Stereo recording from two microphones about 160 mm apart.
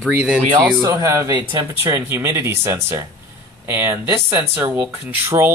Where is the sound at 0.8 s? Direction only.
20° right (ahead or behind).